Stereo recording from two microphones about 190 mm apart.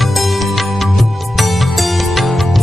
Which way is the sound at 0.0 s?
Centre (ahead or behind).